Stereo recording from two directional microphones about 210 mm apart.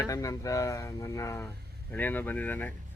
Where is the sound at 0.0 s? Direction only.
15° left (ahead or behind).